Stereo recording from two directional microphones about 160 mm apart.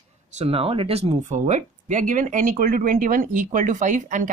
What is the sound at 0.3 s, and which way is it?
Speech, 40° right (ahead or behind).